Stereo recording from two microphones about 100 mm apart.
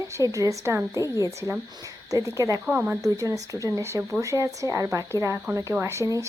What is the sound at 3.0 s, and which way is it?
Speech, 35° right (ahead or behind).